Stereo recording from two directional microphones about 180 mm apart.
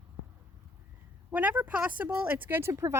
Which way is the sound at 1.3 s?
10° right (ahead or behind).